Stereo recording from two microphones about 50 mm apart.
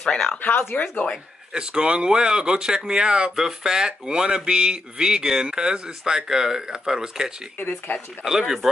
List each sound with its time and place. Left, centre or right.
0.0 s speech: centre
0.4 s speech: left
1.5 s speech: centre
7.5 s speech: left
8.2 s speech: centre